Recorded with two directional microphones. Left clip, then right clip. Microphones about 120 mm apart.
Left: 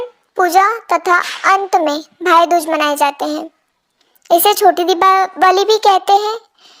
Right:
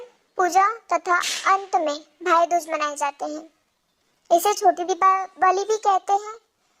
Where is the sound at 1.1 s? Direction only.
45° left (ahead or behind).